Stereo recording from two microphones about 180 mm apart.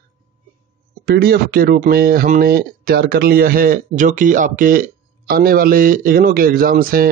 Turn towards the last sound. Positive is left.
turn(degrees=-55)  # may be behind; listen again after turning